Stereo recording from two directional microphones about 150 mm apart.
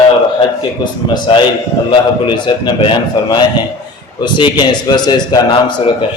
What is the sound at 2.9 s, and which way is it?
A man's voice, 30° left (ahead or behind).